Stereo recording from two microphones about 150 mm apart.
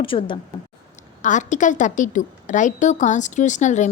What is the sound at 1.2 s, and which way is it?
A woman's voice, 55° left (ahead or behind).